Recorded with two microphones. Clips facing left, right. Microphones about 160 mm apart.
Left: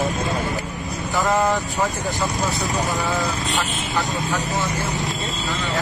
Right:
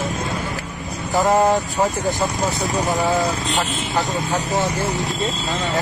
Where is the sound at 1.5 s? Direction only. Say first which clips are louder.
Right 3 dB; 20° right (ahead or behind).